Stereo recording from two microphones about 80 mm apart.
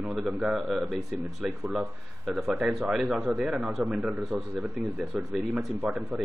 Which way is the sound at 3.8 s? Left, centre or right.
Centre.